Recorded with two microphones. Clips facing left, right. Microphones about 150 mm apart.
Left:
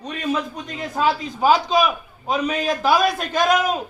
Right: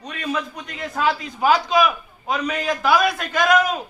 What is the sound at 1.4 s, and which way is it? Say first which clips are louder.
A man's voice: even; 15° left (ahead or behind).